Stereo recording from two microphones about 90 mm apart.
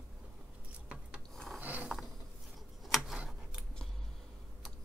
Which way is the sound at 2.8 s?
Centre (ahead or behind).